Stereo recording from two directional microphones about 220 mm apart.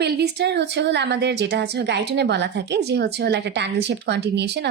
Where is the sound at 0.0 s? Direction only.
50° right (ahead or behind).